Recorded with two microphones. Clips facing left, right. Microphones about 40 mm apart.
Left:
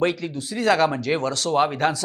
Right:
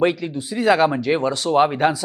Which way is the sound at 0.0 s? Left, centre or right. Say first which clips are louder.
Right 3 dB; centre.